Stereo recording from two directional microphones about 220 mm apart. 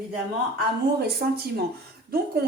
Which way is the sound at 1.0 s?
45° right (ahead or behind).